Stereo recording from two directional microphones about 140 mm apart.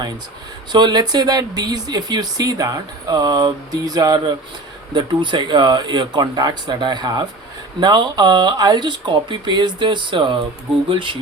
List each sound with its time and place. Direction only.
0.7 s speech: 30° right (ahead or behind)